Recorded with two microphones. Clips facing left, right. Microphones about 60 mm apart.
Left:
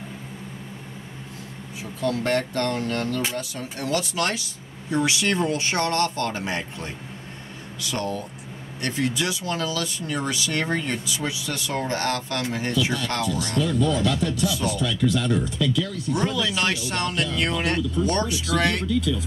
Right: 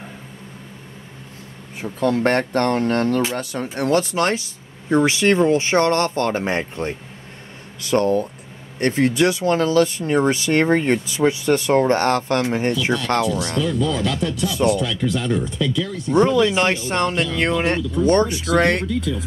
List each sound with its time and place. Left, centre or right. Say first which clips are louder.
1.8 s speech: right 6 dB; right